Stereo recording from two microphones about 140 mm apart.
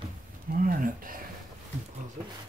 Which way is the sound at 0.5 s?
80° right.